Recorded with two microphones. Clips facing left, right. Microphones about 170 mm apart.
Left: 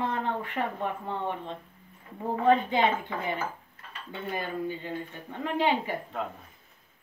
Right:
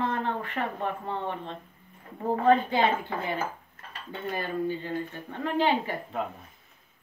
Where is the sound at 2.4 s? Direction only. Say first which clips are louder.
Even; 20° left (ahead or behind).